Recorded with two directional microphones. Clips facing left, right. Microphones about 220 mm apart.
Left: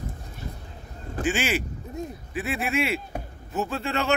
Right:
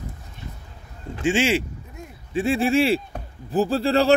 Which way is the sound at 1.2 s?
25° right (ahead or behind).